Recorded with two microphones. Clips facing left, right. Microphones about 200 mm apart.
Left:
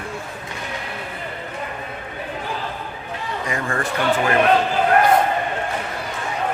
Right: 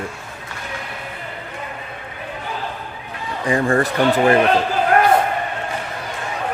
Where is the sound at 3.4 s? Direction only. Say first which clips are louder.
Right 9 dB; 35° right (ahead or behind).